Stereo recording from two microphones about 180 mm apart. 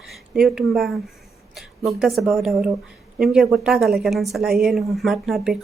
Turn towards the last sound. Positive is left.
turn(degrees=0)  # may be behind; listen again after turning